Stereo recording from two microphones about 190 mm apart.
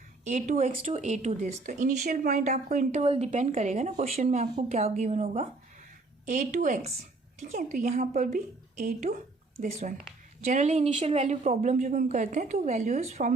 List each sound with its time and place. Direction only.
0.3 s speech: 40° right (ahead or behind)